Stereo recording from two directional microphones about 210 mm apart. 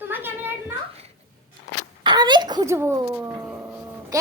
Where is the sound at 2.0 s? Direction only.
20° right (ahead or behind).